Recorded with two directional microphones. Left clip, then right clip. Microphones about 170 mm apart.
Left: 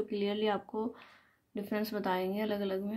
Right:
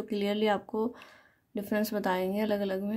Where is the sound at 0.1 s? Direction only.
35° right (ahead or behind).